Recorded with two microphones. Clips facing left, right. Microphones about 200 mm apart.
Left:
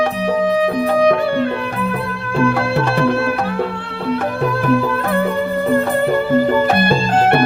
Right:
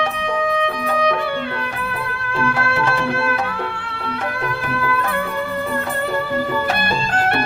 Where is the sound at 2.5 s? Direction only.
60° left (ahead or behind).